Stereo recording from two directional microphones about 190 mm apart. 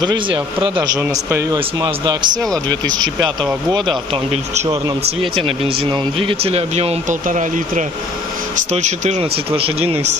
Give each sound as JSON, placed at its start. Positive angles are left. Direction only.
{"t": 0.0, "sound": "speech", "side_deg": -25}